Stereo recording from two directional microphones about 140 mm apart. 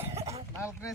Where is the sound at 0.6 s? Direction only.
20° left (ahead or behind).